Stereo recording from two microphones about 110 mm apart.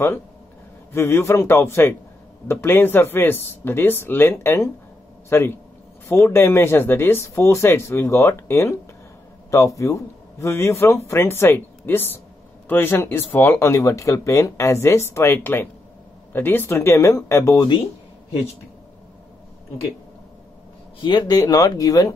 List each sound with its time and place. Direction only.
0.9 s speech: 25° left (ahead or behind)
21.0 s speech: 40° left (ahead or behind)